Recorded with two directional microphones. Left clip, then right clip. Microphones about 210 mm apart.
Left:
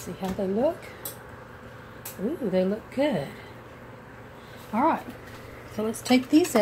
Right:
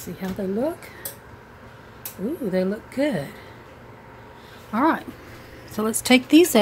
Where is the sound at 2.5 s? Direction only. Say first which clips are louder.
Right 1 dB; 20° right (ahead or behind).